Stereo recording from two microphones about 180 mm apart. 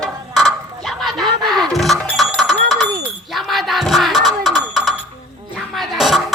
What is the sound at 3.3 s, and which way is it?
Music, centre (ahead or behind).